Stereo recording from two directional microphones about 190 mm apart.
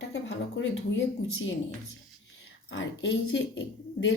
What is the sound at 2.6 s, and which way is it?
Speech, 85° left.